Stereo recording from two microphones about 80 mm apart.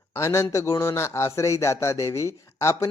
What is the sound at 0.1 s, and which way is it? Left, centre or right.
Speech, left.